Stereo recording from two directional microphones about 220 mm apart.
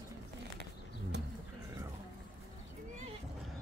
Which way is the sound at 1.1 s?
50° right (ahead or behind).